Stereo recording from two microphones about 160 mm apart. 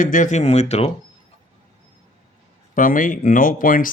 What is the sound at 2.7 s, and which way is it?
Speech, 55° left (ahead or behind).